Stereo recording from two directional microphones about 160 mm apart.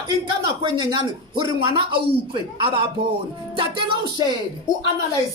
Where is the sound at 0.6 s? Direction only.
25° right (ahead or behind).